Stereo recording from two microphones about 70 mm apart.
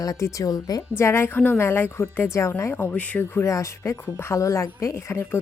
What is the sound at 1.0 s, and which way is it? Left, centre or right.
Speech, left.